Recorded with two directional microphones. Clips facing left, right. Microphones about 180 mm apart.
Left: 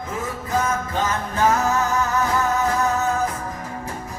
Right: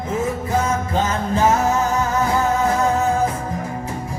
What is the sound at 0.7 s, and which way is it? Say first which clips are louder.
Music: right 3 dB; 25° right (ahead or behind).